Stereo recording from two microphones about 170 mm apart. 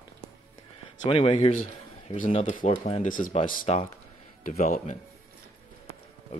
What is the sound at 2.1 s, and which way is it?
Speech, 50° left (ahead or behind).